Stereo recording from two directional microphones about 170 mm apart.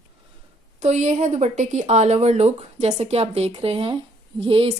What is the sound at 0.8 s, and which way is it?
Speech, 40° right (ahead or behind).